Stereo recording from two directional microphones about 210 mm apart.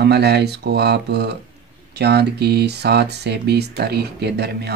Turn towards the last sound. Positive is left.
turn(degrees=-50)  # may be behind; listen again after turning